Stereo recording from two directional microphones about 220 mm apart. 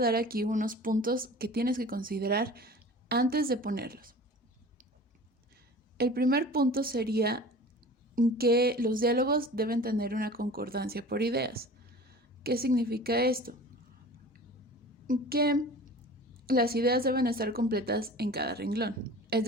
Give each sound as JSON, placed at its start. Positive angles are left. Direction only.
{"t": 0.0, "sound": "speech", "side_deg": -45}
{"t": 6.0, "sound": "speech", "side_deg": -45}
{"t": 15.0, "sound": "a woman's voice", "side_deg": -40}